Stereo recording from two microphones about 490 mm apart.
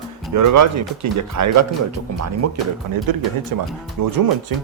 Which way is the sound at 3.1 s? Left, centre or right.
Right.